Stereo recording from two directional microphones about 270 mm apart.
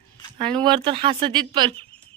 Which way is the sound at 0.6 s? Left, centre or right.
Centre.